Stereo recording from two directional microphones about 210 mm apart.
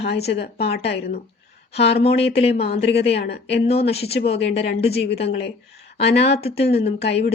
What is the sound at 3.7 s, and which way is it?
Speech, 30° left (ahead or behind).